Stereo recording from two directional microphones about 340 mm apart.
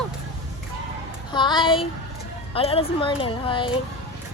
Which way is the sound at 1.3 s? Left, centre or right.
Centre.